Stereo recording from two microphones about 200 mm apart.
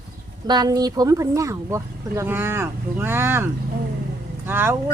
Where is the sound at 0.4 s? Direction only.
20° right (ahead or behind).